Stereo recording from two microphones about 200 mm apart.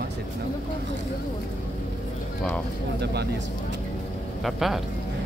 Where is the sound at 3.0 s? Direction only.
55° right (ahead or behind).